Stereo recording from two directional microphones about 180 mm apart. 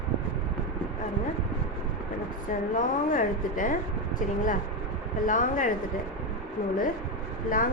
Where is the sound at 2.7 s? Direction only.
45° left (ahead or behind).